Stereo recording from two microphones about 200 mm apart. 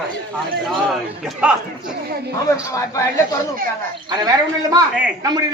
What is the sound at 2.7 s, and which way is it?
Speech, 15° left (ahead or behind).